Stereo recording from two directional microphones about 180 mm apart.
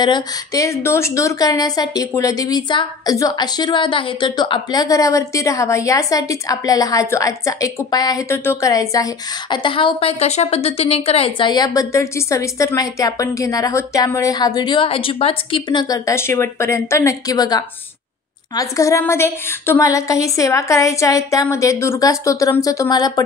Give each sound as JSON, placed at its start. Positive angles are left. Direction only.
{"t": 0.0, "sound": "a woman's voice", "side_deg": 20}